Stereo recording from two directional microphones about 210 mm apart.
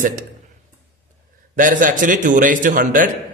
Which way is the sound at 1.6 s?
40° right (ahead or behind).